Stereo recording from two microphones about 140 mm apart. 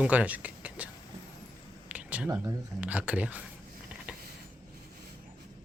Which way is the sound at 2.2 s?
20° right (ahead or behind).